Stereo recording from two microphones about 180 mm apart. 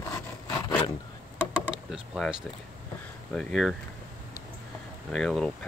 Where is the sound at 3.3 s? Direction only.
Centre (ahead or behind).